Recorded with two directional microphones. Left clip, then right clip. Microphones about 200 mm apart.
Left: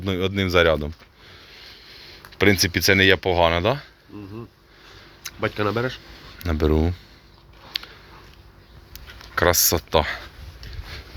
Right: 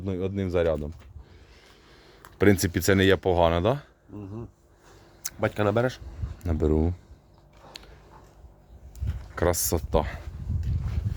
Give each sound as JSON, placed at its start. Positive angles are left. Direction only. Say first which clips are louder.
{"t": 0.0, "sound": "speech", "louder": "left 6 dB", "side_deg": 10}
{"t": 2.4, "sound": "speech", "louder": "left 4 dB", "side_deg": -25}
{"t": 5.2, "sound": "speech", "louder": "left 1 dB", "side_deg": -50}
{"t": 6.4, "sound": "speech", "louder": "left 4 dB", "side_deg": -5}
{"t": 7.7, "sound": "a sound", "louder": "left 17 dB", "side_deg": 0}